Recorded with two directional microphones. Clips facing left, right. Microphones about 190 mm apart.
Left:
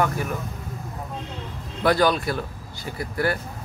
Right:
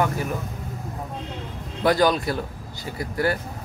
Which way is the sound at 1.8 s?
15° right (ahead or behind).